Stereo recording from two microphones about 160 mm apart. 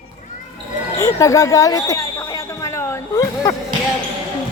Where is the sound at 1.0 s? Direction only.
15° left (ahead or behind).